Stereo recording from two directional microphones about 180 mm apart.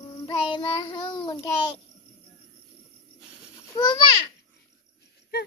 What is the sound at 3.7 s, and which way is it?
Speech, 20° left (ahead or behind).